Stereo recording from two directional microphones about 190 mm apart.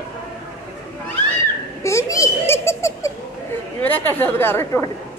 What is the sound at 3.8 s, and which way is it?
A woman's voice, 10° left (ahead or behind).